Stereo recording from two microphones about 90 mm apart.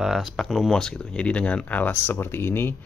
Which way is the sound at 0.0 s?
5° right (ahead or behind).